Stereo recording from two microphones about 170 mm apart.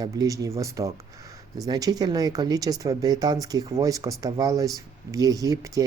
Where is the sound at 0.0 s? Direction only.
20° right (ahead or behind).